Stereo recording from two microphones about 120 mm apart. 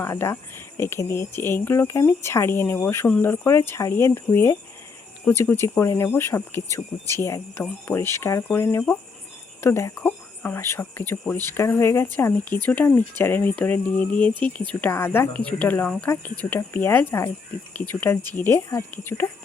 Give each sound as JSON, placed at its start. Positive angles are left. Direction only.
{"t": 0.0, "sound": "speech", "side_deg": 20}
{"t": 9.9, "sound": "speech", "side_deg": 10}